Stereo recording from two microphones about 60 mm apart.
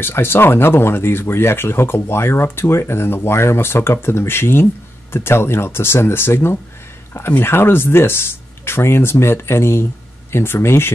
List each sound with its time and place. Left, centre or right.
0.0 s speech: left